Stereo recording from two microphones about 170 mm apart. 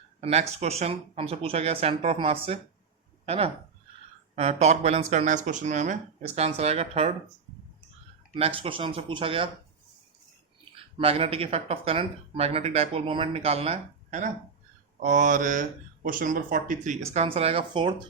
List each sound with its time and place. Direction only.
0.2 s speech: 40° right (ahead or behind)
8.4 s speech: 35° right (ahead or behind)
10.7 s speech: 35° right (ahead or behind); by 17.0 s 50° right (ahead or behind)
17.2 s speech: 35° right (ahead or behind)